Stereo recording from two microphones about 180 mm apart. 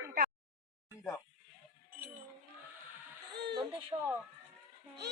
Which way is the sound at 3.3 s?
65° right (ahead or behind).